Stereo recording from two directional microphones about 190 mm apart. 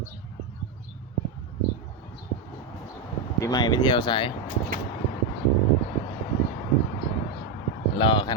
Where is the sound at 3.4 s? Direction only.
20° left (ahead or behind).